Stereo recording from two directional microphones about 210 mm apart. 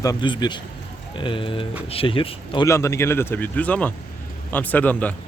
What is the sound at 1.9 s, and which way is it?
A man's voice, 25° left (ahead or behind).